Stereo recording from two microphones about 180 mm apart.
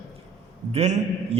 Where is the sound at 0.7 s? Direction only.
40° right (ahead or behind).